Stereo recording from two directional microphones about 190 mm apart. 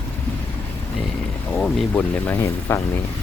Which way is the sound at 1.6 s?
5° left (ahead or behind).